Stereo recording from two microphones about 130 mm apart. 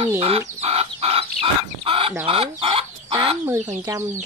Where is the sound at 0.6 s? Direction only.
50° right (ahead or behind).